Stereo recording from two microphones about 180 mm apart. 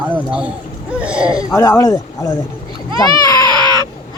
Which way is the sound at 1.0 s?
5° right (ahead or behind).